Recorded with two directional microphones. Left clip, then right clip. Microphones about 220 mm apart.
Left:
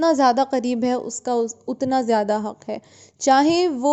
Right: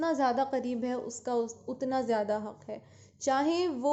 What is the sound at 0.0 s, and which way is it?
A woman's voice, 45° left (ahead or behind).